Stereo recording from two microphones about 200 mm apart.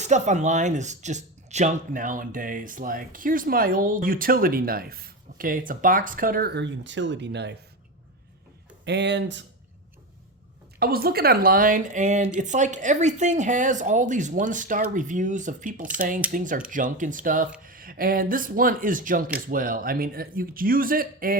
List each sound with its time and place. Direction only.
0.0 s speech: 35° right (ahead or behind); by 7.5 s 60° right (ahead or behind)
8.8 s speech: 60° right (ahead or behind)
10.8 s speech: 50° right (ahead or behind)